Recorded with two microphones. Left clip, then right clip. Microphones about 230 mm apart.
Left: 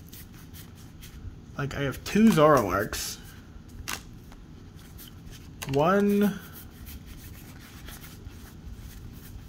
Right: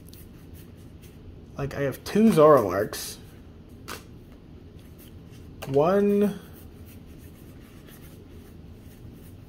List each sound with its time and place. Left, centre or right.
1.6 s speech: left
5.7 s speech: left